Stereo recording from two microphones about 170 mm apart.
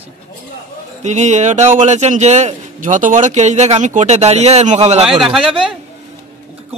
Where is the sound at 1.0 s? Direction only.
45° right (ahead or behind).